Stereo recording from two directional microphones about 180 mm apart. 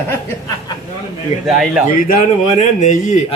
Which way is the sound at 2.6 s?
45° left (ahead or behind).